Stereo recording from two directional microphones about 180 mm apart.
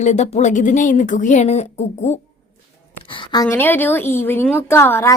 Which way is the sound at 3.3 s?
20° left (ahead or behind).